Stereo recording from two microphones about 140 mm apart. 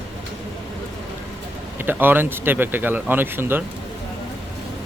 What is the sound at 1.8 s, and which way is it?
Speech, 15° right (ahead or behind).